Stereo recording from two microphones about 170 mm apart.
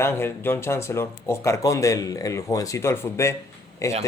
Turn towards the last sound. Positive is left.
turn(degrees=20)  # may be behind; listen again after turning